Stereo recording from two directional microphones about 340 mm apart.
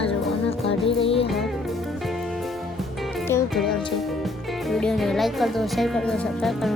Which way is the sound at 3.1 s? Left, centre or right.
Centre.